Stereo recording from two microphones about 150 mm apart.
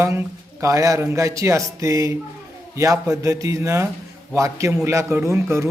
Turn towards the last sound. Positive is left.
turn(degrees=-20)  # may be behind; listen again after turning